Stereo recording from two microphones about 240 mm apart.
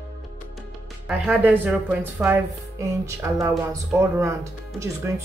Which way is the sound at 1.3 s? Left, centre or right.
Centre.